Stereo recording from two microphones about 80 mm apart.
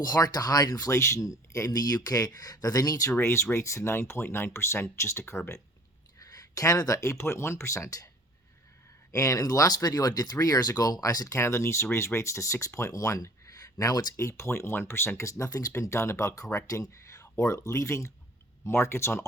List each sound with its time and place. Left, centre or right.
0.0 s speech: left
3.2 s speech: left
6.1 s speech: left
9.1 s speech: left
11.3 s speech: left
14.2 s speech: left
15.3 s speech: left